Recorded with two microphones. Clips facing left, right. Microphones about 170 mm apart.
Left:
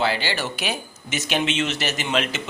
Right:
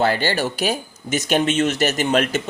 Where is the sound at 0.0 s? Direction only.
45° right (ahead or behind).